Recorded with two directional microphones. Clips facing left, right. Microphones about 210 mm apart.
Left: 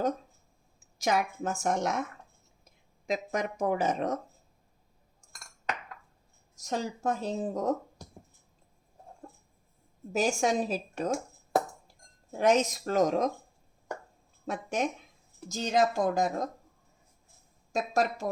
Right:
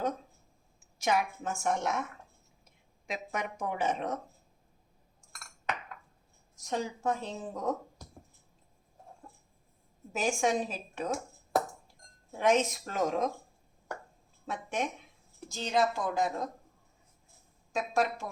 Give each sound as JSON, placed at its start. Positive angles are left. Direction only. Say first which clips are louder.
{"t": 1.0, "sound": "speech", "louder": "left 2 dB", "side_deg": 40}
{"t": 3.1, "sound": "speech", "louder": "left 5 dB", "side_deg": 40}
{"t": 6.6, "sound": "speech", "louder": "left 1 dB", "side_deg": 40}
{"t": 10.1, "sound": "speech", "louder": "left 2 dB", "side_deg": 40}
{"t": 12.4, "sound": "speech", "louder": "left 2 dB", "side_deg": 40}
{"t": 14.4, "sound": "speech", "louder": "left 3 dB", "side_deg": 40}
{"t": 17.7, "sound": "a woman's voice", "louder": "left 2 dB", "side_deg": 40}